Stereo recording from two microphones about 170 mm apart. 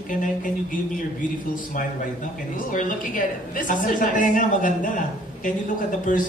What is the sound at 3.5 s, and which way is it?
A man's voice, 50° left (ahead or behind).